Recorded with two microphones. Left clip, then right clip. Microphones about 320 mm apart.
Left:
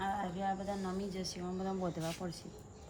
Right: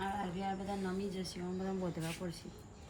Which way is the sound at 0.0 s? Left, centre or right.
Centre.